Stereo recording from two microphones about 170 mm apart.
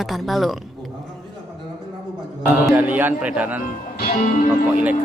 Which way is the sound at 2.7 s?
10° right (ahead or behind).